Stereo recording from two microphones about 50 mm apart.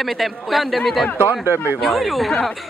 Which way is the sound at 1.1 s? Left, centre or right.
Right.